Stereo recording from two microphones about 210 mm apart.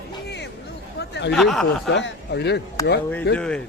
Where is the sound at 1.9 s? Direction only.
60° left (ahead or behind).